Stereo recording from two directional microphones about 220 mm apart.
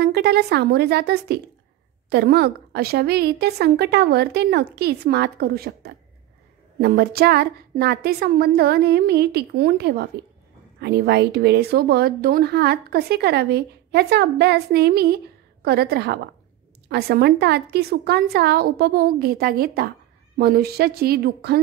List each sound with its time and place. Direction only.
0.0 s speech: 45° right (ahead or behind)